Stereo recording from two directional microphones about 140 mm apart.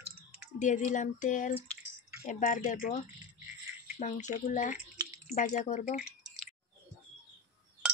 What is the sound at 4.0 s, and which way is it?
Speech, 60° left (ahead or behind).